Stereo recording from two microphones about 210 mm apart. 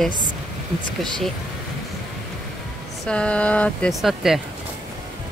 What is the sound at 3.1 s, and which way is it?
Speech, 5° left (ahead or behind).